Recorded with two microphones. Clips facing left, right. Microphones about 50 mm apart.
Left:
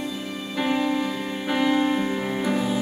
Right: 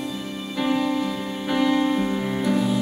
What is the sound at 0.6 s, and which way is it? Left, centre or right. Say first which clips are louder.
Music: right 1 dB; centre.